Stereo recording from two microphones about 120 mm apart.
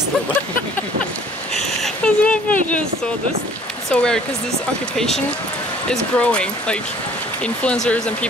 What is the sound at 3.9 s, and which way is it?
Speech, 5° left (ahead or behind).